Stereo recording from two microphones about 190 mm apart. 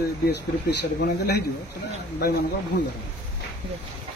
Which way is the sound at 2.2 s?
55° left (ahead or behind).